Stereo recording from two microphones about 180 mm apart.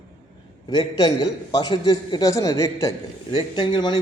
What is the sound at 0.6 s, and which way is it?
A man's voice, 25° left (ahead or behind).